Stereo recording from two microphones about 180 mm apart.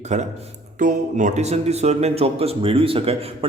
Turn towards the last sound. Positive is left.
turn(degrees=-30)  # may be behind; listen again after turning